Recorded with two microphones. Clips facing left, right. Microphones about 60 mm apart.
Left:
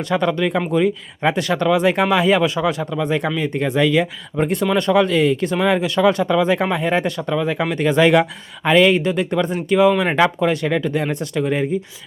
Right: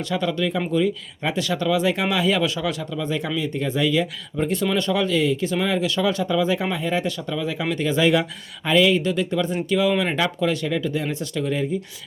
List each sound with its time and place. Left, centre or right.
0.0 s speech: left
6.2 s speech: left
9.0 s speech: left